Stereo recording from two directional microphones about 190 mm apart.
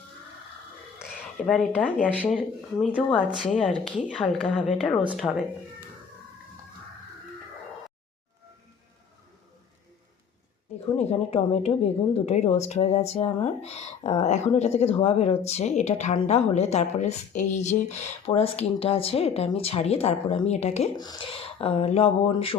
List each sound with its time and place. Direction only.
1.4 s a woman's voice: 5° left (ahead or behind)
10.9 s a woman's voice: 35° left (ahead or behind)
21.0 s speech: 25° left (ahead or behind)